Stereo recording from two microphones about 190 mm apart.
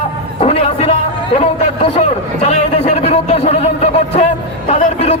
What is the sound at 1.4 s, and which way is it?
A man's voice, 35° left (ahead or behind).